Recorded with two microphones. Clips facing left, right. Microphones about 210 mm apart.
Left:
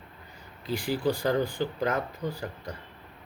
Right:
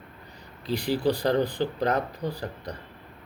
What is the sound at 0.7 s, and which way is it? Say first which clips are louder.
Speech: right 3 dB; 35° right (ahead or behind).